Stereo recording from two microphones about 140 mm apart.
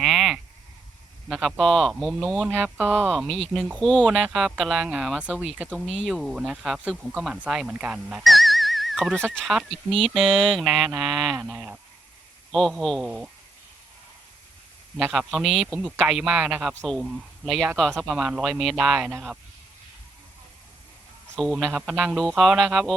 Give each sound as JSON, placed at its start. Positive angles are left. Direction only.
{"t": 0.0, "sound": "a sound", "side_deg": 0}
{"t": 1.3, "sound": "speech", "side_deg": 0}
{"t": 2.5, "sound": "goose", "side_deg": -15}
{"t": 3.1, "sound": "speech", "side_deg": 0}
{"t": 5.5, "sound": "goose", "side_deg": -10}
{"t": 5.9, "sound": "speech", "side_deg": -5}
{"t": 11.3, "sound": "goose", "side_deg": -10}
{"t": 12.5, "sound": "speech", "side_deg": 5}
{"t": 13.1, "sound": "goose", "side_deg": -5}
{"t": 15.1, "sound": "speech", "side_deg": 0}
{"t": 17.7, "sound": "speech", "side_deg": 5}
{"t": 19.1, "sound": "goose", "side_deg": -10}
{"t": 21.4, "sound": "speech", "side_deg": -5}